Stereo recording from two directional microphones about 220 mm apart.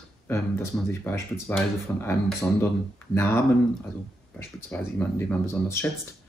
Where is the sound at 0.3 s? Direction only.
10° left (ahead or behind).